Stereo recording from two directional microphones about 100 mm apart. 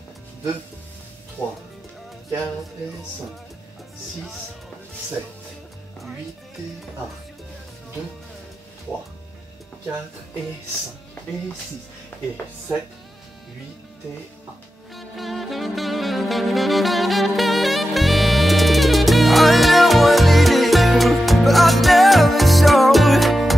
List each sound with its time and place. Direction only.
1.4 s speech: 5° left (ahead or behind)
5.9 s music: centre (ahead or behind)
12.1 s speech: 20° left (ahead or behind)
15.0 s saxophone: centre (ahead or behind)